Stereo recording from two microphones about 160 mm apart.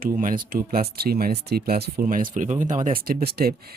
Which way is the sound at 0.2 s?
60° right (ahead or behind).